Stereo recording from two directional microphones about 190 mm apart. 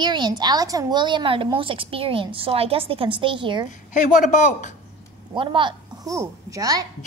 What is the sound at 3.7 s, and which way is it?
Speech, 40° left (ahead or behind).